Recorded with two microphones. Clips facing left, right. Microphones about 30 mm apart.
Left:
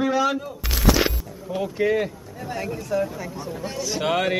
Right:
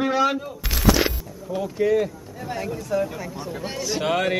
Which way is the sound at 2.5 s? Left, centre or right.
Centre.